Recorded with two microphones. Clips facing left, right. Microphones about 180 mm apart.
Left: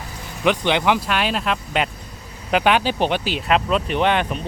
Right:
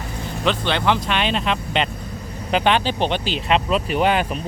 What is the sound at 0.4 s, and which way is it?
Speech, 15° left (ahead or behind).